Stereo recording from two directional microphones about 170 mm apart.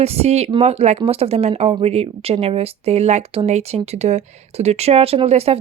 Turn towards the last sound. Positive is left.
turn(degrees=-35)  # may be behind; listen again after turning